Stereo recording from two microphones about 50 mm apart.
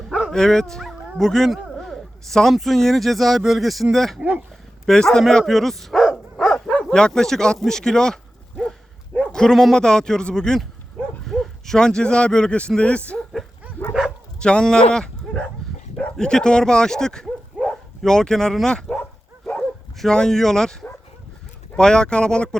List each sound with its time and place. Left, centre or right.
0.3 s speech: centre
1.5 s speech: centre
1.7 s speech: centre
4.2 s speech: right
4.9 s speech: centre
6.3 s dog: centre
6.9 s speech: centre
7.6 s a sound: centre
9.3 s speech: centre
14.3 s speech: centre
20.0 s speech: centre
21.8 s speech: centre